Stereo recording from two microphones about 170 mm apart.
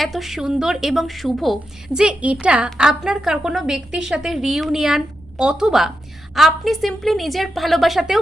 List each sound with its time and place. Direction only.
0.0 s a woman's voice: centre (ahead or behind)